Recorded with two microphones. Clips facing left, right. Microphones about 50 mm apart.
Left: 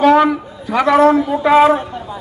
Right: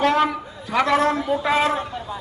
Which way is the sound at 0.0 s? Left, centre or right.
Centre.